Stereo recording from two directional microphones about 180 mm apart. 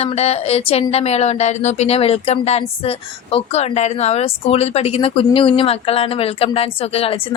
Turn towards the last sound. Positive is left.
turn(degrees=30)  # may be behind; listen again after turning